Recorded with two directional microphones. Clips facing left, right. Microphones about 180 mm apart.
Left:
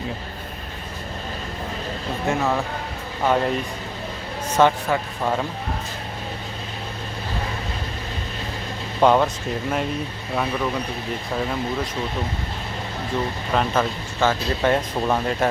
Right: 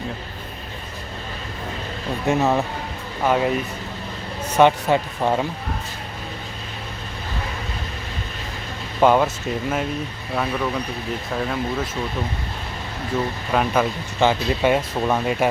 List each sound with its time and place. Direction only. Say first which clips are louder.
2.3 s a man's voice: right 4 dB; 20° right (ahead or behind)
3.2 s speech: right 1 dB; 5° right (ahead or behind)
4.5 s speech: right 3 dB; 20° right (ahead or behind)
9.0 s speech: right 1 dB; 5° right (ahead or behind)
13.5 s speech: right 2 dB; 5° right (ahead or behind)